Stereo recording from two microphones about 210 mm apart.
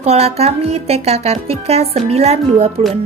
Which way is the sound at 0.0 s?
30° right (ahead or behind).